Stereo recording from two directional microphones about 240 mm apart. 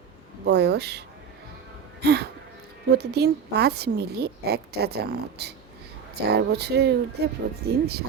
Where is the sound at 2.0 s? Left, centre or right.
Right.